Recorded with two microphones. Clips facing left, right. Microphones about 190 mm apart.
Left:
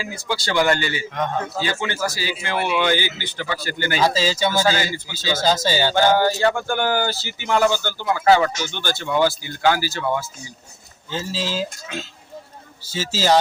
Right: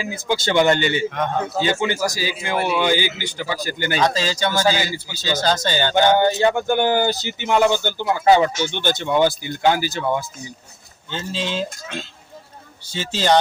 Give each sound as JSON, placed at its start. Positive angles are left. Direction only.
{"t": 0.0, "sound": "speech", "side_deg": -20}
{"t": 3.9, "sound": "speech", "side_deg": 5}
{"t": 4.6, "sound": "speech", "side_deg": -10}
{"t": 5.2, "sound": "speech", "side_deg": 10}
{"t": 6.1, "sound": "speech", "side_deg": -20}
{"t": 11.1, "sound": "speech", "side_deg": 5}